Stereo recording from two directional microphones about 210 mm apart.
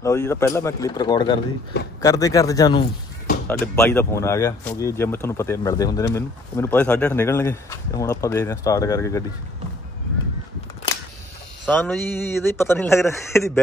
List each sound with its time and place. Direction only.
0.0 s speech: 15° left (ahead or behind)
11.6 s speech: 5° left (ahead or behind)